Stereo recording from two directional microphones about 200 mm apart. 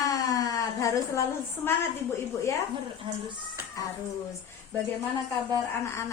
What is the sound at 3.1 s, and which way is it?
Speech, 25° right (ahead or behind).